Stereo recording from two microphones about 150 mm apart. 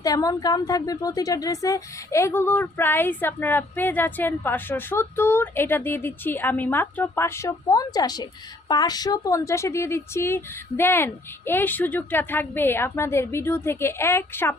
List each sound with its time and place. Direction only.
0.0 s a woman's voice: 25° left (ahead or behind)